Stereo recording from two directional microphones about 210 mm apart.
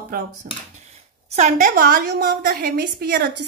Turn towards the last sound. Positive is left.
turn(degrees=-50)  # may be behind; listen again after turning